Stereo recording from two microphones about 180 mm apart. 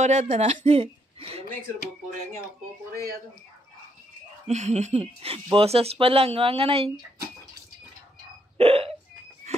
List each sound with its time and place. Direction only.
0.0 s speech: 40° right (ahead or behind)
2.9 s speech: 55° right (ahead or behind)
4.5 s speech: 40° right (ahead or behind)
8.5 s hiccup: 30° right (ahead or behind)